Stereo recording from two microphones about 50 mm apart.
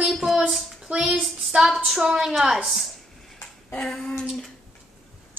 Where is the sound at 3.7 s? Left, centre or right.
Left.